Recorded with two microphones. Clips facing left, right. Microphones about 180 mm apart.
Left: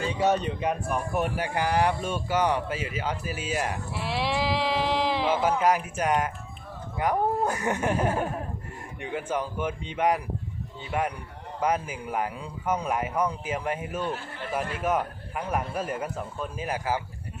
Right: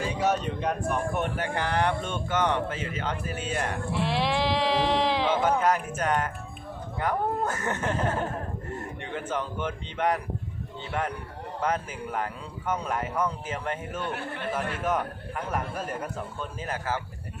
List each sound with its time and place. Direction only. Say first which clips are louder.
0.6 s a man's voice: even; 5° left (ahead or behind)
14.1 s a man's voice: right 2 dB; 65° right (ahead or behind)
14.5 s a man's voice: left 2 dB; 10° left (ahead or behind)